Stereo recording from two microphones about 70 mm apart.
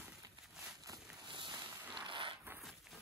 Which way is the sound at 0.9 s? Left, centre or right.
Right.